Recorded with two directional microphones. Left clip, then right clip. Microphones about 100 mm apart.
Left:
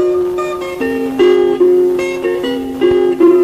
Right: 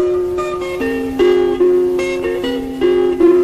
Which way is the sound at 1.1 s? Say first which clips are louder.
Left 3 dB; 30° right (ahead or behind).